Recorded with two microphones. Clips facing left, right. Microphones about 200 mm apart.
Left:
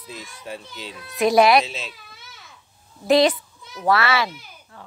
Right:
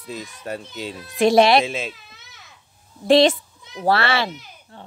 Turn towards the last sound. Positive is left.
turn(degrees=-20)  # may be behind; listen again after turning